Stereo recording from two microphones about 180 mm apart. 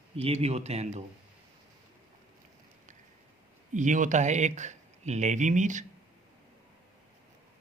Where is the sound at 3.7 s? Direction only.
45° right (ahead or behind).